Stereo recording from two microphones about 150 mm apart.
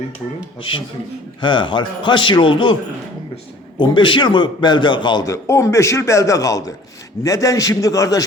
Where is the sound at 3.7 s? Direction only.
30° left (ahead or behind).